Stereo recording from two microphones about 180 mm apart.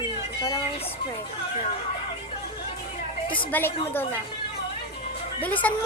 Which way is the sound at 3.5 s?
10° left (ahead or behind).